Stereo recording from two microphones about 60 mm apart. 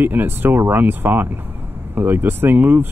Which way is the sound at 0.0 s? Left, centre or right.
Right.